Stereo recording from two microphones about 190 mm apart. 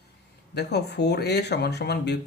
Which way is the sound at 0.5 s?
60° left (ahead or behind).